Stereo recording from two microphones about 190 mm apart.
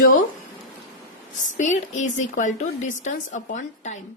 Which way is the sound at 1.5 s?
40° left (ahead or behind).